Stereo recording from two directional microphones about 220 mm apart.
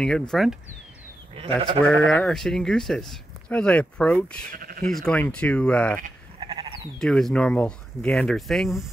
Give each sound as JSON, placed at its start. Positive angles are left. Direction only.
{"t": 0.0, "sound": "speech", "side_deg": 5}
{"t": 1.3, "sound": "speech", "side_deg": -25}
{"t": 1.9, "sound": "speech", "side_deg": 5}
{"t": 4.5, "sound": "speech", "side_deg": -40}
{"t": 4.8, "sound": "speech", "side_deg": 5}
{"t": 6.4, "sound": "sheep", "side_deg": -20}
{"t": 7.0, "sound": "speech", "side_deg": 0}